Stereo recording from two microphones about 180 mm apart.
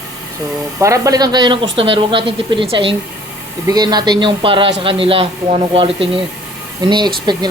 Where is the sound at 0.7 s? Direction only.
15° right (ahead or behind).